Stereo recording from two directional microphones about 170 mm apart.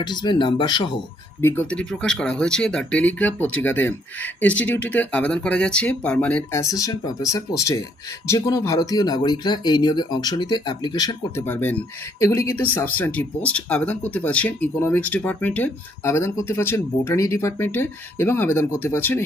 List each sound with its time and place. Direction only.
0.0 s speech: 25° left (ahead or behind)
1.4 s speech: 15° left (ahead or behind)
11.4 s speech: 10° left (ahead or behind)